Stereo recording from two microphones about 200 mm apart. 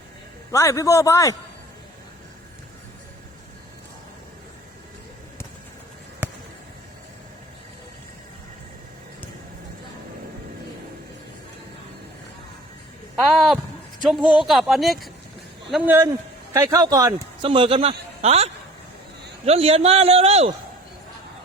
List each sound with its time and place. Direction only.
0.5 s a man's voice: 15° left (ahead or behind)
6.2 s basketball bounce: 10° right (ahead or behind)
13.1 s a man's voice: centre (ahead or behind); by 20.5 s 30° right (ahead or behind)